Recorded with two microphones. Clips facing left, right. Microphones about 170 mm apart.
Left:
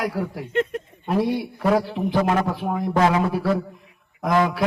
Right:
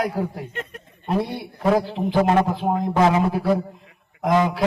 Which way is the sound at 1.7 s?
25° right (ahead or behind).